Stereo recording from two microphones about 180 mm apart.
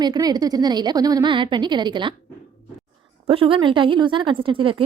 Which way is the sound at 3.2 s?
30° right (ahead or behind).